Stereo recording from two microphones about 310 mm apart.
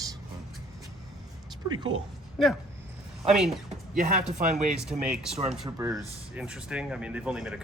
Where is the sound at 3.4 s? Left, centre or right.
Right.